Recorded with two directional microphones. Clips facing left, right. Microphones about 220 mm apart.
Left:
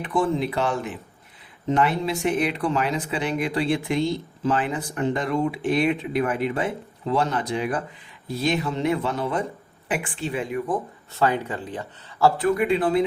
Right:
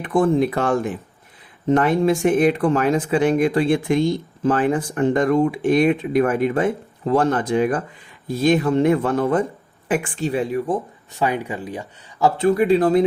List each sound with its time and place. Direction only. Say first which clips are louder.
0.0 s speech: right 6 dB; 50° right (ahead or behind); by 10.8 s 35° right (ahead or behind)
11.1 s speech: right 1 dB; 15° right (ahead or behind)
12.4 s speech: right 5 dB; 30° right (ahead or behind)